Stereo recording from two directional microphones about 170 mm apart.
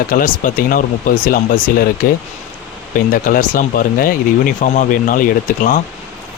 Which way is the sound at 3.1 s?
55° left (ahead or behind).